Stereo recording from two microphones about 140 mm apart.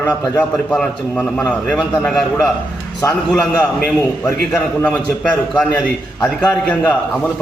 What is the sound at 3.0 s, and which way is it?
Speech, 20° left (ahead or behind).